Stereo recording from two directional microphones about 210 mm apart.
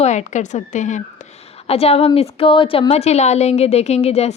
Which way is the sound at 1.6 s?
30° left (ahead or behind).